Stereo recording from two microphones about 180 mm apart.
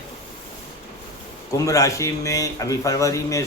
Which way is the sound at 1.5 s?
20° left (ahead or behind).